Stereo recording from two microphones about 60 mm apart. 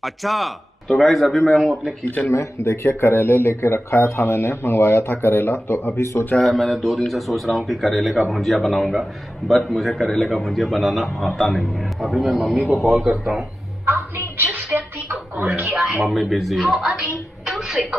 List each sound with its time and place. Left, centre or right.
0.0 s a man's voice: centre
2.2 s speech: left
6.3 s a man's voice: centre
13.8 s a sound: right
15.7 s a man's voice: centre